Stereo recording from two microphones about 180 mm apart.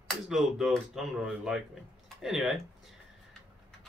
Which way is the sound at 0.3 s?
Centre (ahead or behind).